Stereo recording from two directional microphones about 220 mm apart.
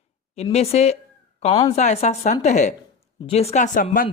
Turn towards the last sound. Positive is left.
turn(degrees=40)  # may be behind; listen again after turning